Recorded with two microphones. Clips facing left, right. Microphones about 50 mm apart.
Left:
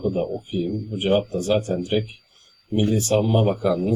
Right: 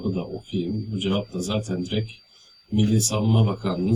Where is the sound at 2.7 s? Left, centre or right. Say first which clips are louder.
Left 3 dB; left.